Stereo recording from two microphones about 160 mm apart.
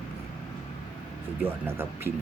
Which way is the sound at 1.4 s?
15° right (ahead or behind).